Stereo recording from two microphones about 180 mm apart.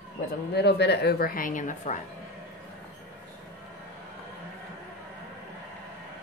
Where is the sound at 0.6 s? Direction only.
70° left (ahead or behind); by 2.0 s 45° left (ahead or behind).